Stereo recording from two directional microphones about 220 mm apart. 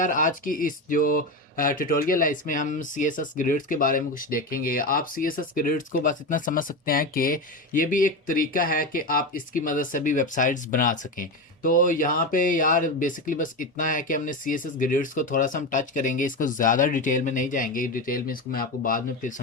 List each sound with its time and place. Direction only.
0.0 s speech: 35° left (ahead or behind)